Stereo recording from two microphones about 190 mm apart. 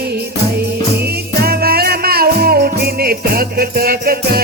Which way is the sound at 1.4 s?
55° right (ahead or behind).